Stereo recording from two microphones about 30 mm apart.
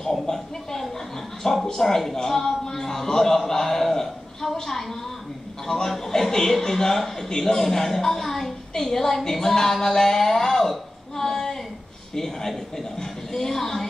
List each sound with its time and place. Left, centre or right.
0.1 s a sound: centre
1.4 s speech: centre
1.7 s a man's voice: centre